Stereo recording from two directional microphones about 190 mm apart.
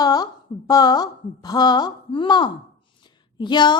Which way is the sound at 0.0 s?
20° left (ahead or behind).